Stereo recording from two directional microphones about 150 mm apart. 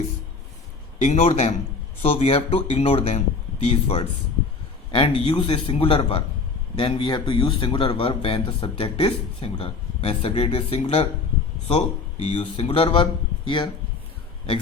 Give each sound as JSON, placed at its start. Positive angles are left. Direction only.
{"t": 0.9, "sound": "speech", "side_deg": 50}
{"t": 12.2, "sound": "speech", "side_deg": 40}